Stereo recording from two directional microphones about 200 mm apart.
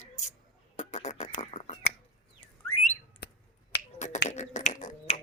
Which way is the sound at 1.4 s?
35° left (ahead or behind).